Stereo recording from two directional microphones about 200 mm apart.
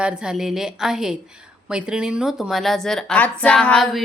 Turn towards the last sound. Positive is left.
turn(degrees=0)  # may be behind; listen again after turning